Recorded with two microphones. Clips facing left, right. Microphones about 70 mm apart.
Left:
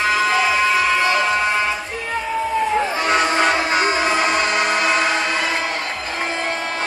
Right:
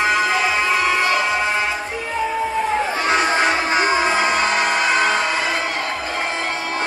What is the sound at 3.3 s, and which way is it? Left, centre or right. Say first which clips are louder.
Music: even; right.